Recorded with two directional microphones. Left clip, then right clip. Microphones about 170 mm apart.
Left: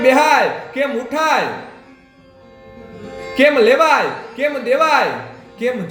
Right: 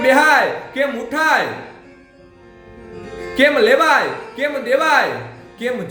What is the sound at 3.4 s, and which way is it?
Speech, 15° right (ahead or behind).